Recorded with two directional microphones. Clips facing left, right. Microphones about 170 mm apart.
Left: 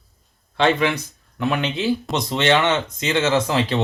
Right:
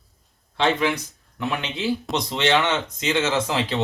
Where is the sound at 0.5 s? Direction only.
60° left (ahead or behind).